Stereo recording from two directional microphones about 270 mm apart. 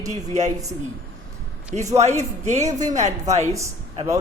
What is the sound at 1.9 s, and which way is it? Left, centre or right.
A man's voice, right.